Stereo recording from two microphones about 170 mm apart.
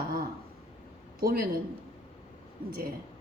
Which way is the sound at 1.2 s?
60° right (ahead or behind).